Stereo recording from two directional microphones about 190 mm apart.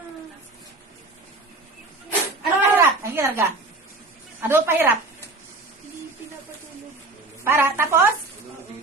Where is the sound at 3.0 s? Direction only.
10° right (ahead or behind).